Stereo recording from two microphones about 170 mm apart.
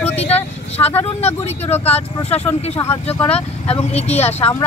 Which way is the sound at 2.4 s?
15° left (ahead or behind).